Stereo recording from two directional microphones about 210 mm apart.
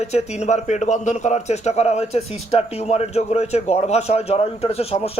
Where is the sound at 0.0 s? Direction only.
30° left (ahead or behind).